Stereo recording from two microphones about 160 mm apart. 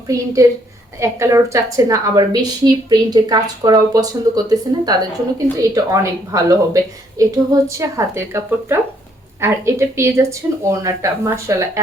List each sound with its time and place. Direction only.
0.4 s a woman's voice: 20° right (ahead or behind)